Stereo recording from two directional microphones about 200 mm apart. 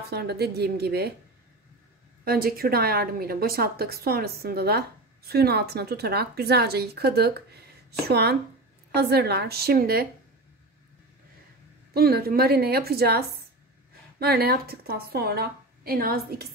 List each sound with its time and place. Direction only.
0.1 s a woman's voice: 55° right (ahead or behind)
2.2 s a woman's voice: 50° right (ahead or behind)
11.9 s a woman's voice: 50° right (ahead or behind)
14.2 s a woman's voice: 50° right (ahead or behind)